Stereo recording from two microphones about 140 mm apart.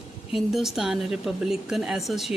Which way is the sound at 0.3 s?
Centre (ahead or behind).